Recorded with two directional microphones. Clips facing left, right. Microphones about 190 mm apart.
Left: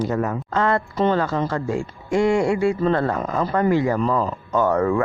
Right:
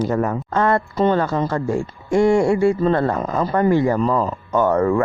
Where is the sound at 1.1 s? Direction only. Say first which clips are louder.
Right 2 dB; 25° right (ahead or behind).